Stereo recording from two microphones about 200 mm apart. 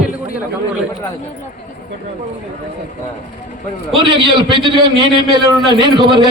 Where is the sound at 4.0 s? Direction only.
25° right (ahead or behind).